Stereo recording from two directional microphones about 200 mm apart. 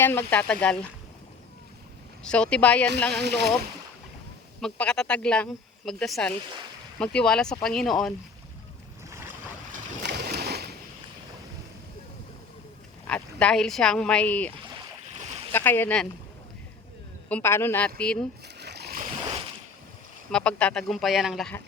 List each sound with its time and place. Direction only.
0.0 s speech: 10° left (ahead or behind)
2.2 s a woman's voice: 5° left (ahead or behind)
4.6 s a woman's voice: 5° left (ahead or behind)
10.0 s a sound: 55° right (ahead or behind)
13.1 s a woman's voice: 5° left (ahead or behind)
15.5 s speech: 10° left (ahead or behind)
17.2 s speech: 10° left (ahead or behind)
18.4 s a sound: 55° right (ahead or behind)
20.3 s a woman's voice: 5° left (ahead or behind)